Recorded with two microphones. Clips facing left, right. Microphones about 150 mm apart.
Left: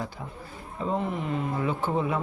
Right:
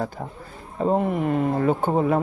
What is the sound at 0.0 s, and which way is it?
Speech, 50° right (ahead or behind).